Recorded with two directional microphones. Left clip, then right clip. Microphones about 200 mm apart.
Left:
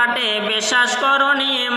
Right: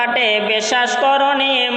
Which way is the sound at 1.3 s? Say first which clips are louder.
Right 3 dB; 20° left (ahead or behind).